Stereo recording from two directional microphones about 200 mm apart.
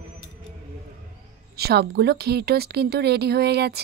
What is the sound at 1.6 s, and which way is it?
Speech, 55° right (ahead or behind).